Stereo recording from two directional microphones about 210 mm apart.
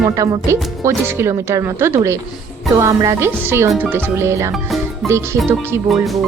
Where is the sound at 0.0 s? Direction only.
15° right (ahead or behind).